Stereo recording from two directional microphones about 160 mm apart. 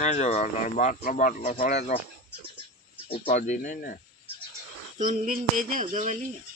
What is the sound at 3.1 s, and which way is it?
Speech, 45° left (ahead or behind).